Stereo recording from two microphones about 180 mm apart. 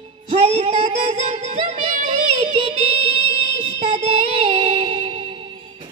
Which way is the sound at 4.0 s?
35° right (ahead or behind).